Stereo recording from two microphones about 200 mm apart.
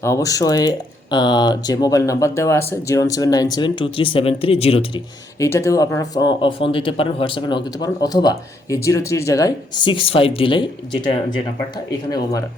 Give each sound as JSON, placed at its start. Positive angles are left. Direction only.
{"t": 0.0, "sound": "speech", "side_deg": 15}
{"t": 5.4, "sound": "speech", "side_deg": 15}